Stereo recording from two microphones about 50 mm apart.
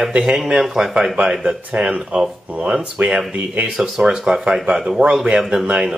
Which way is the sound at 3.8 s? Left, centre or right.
Centre.